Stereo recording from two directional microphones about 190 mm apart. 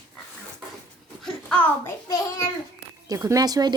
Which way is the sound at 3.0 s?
15° right (ahead or behind).